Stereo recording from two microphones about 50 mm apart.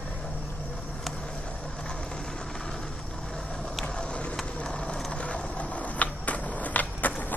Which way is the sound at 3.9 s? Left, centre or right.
Centre.